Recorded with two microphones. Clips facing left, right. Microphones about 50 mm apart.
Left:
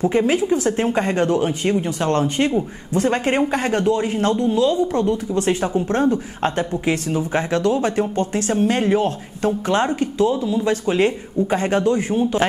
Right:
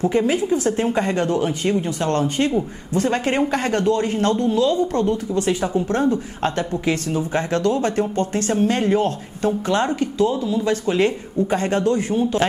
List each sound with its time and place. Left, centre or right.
0.0 s speech: centre
3.3 s speech: centre
5.1 s speech: left
9.9 s speech: left